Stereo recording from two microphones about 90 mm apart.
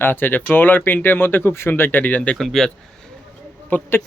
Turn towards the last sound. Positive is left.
turn(degrees=20)  # may be behind; listen again after turning